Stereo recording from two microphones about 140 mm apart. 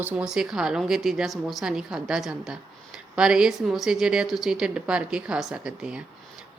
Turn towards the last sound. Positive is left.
turn(degrees=-5)  # may be behind; listen again after turning